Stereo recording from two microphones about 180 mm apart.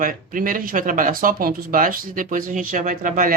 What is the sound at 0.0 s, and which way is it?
Speech, 50° right (ahead or behind).